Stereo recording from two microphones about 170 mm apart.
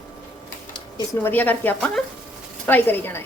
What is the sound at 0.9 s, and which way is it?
Speech, 10° left (ahead or behind).